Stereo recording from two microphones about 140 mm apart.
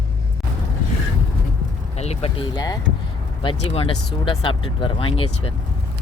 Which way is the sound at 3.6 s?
50° left (ahead or behind).